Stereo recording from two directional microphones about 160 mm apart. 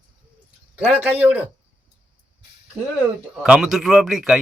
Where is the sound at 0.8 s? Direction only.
10° right (ahead or behind).